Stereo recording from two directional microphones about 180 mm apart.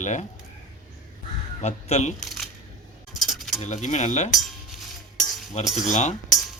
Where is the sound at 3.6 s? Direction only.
40° left (ahead or behind).